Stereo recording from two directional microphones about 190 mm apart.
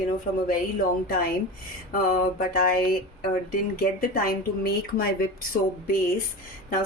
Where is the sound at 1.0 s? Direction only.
50° left (ahead or behind).